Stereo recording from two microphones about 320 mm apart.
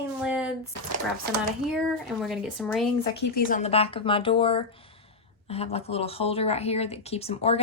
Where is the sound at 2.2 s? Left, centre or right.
Centre.